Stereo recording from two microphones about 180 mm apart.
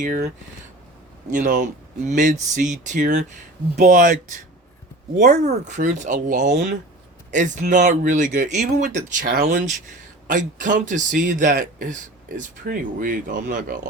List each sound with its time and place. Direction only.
1.3 s speech: 45° right (ahead or behind)
9.2 s speech: 60° right (ahead or behind)
10.2 s speech: 45° right (ahead or behind)